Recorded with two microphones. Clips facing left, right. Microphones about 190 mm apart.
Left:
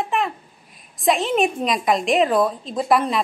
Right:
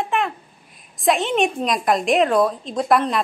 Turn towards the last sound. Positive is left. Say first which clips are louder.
# right 1 dB
turn(degrees=0)  # may be behind; listen again after turning